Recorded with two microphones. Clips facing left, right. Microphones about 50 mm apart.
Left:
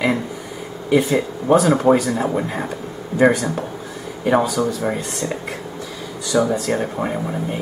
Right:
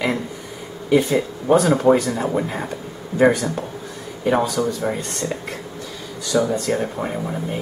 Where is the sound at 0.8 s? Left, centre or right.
Centre.